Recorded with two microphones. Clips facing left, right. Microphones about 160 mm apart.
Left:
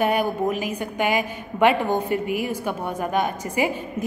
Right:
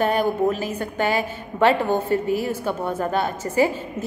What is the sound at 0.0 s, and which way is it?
A woman's voice, 10° left (ahead or behind).